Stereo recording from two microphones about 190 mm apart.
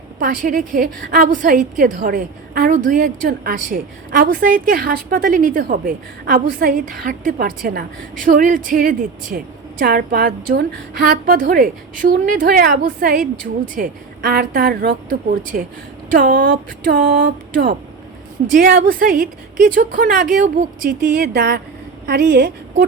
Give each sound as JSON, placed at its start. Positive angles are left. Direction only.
{"t": 0.2, "sound": "a woman's voice", "side_deg": -50}